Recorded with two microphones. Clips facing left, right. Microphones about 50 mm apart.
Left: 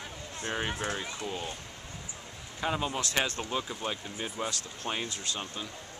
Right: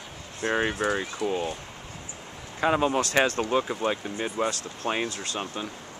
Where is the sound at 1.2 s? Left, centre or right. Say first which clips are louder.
Right 12 dB; centre.